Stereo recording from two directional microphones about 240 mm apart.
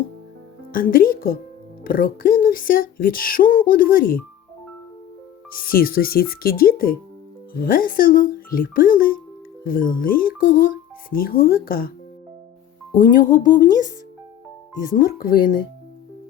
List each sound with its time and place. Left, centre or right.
0.7 s speech: left
5.5 s speech: left
13.0 s speech: left
14.9 s speech: left